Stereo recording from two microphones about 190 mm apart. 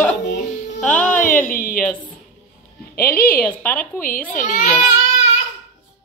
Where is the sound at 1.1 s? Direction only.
45° left (ahead or behind).